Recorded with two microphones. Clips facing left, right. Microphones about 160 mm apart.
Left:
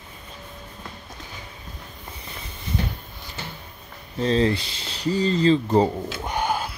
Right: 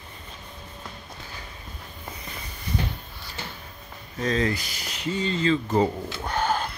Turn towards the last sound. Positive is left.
turn(degrees=10)  # may be behind; listen again after turning